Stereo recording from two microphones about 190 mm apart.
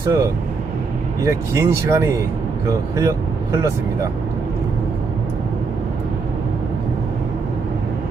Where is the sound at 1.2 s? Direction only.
15° right (ahead or behind).